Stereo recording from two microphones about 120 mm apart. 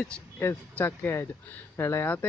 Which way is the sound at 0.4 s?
20° left (ahead or behind).